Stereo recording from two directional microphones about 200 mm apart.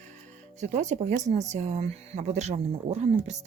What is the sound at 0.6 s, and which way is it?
Speech, 35° right (ahead or behind).